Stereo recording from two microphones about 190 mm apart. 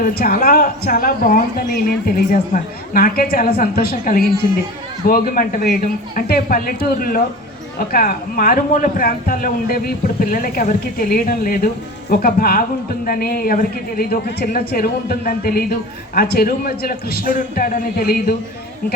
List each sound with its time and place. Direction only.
0.0 s speech: 50° left (ahead or behind)